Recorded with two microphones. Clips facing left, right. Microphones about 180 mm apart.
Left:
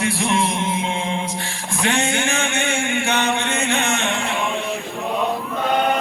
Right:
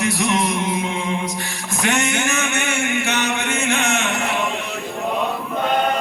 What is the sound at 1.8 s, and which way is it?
Music, 30° left (ahead or behind).